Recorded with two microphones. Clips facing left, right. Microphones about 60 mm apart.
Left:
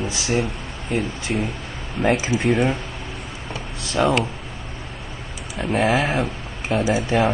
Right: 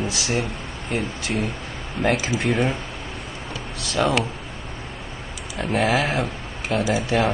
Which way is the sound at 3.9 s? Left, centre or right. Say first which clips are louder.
Left 2 dB; centre.